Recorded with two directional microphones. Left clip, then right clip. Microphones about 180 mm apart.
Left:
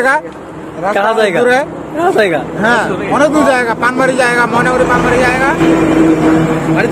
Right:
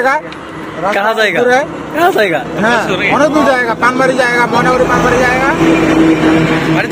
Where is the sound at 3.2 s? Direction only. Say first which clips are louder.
Left 2 dB; 25° left (ahead or behind).